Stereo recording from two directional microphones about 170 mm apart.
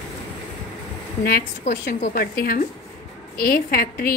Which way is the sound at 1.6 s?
45° left (ahead or behind).